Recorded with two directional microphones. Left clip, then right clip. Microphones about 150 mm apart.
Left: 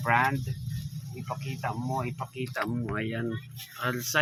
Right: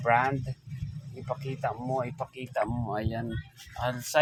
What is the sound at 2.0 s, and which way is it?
Speech, 25° right (ahead or behind).